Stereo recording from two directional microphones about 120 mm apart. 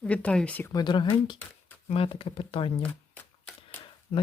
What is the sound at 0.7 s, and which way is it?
Speech, 35° left (ahead or behind).